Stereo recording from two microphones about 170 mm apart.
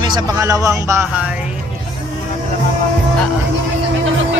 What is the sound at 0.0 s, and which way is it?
Speech, 25° right (ahead or behind).